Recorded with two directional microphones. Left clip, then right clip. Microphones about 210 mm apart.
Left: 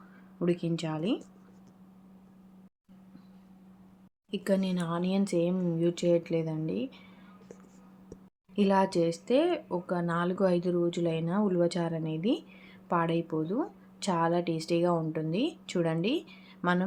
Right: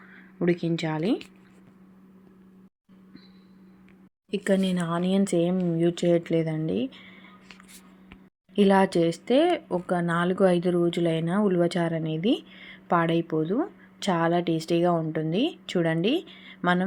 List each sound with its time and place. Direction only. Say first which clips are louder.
0.3 s speech: right 5 dB; 15° right (ahead or behind)
4.3 s speech: right 5 dB; 15° right (ahead or behind)
8.5 s speech: right 5 dB; 20° right (ahead or behind)